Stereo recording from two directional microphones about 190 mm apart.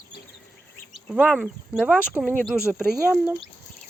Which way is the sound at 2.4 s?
10° left (ahead or behind).